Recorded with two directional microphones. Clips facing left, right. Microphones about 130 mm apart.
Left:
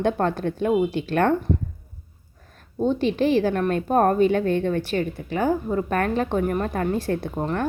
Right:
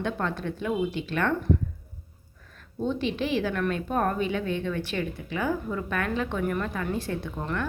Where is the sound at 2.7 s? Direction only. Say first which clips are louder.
Left 6 dB; 40° left (ahead or behind).